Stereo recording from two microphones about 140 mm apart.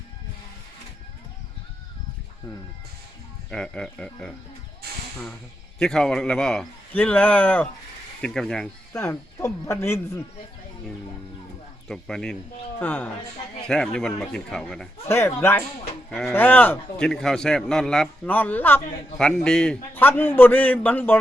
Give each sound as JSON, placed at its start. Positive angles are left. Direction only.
{"t": 3.5, "sound": "a man's voice", "side_deg": 5}
{"t": 5.8, "sound": "a man's voice", "side_deg": 5}
{"t": 8.9, "sound": "speech", "side_deg": 15}
{"t": 11.9, "sound": "a man's voice", "side_deg": 5}
{"t": 15.0, "sound": "speech", "side_deg": 15}
{"t": 16.0, "sound": "a man's voice", "side_deg": 5}